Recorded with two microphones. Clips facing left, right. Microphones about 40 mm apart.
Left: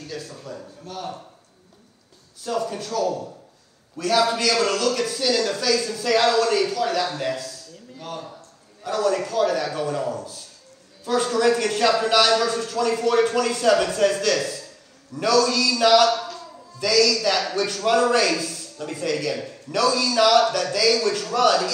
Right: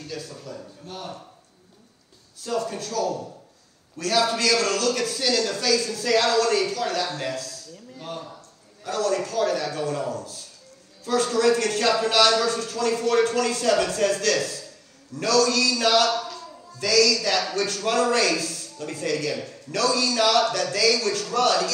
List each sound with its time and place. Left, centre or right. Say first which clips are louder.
0.2 s a man's voice: left 1 dB; left
2.4 s a man's voice: left 1 dB; left
5.1 s speech: left 2 dB; centre
5.8 s a man's voice: left 2 dB; left
8.0 s a man's voice: left 1 dB; left
8.9 s a man's voice: left 2 dB; left
16.1 s a sound: left 3 dB; left
16.8 s a man's voice: left 1 dB; left